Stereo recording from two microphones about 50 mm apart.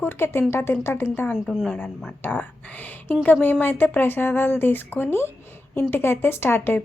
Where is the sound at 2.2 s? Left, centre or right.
Left.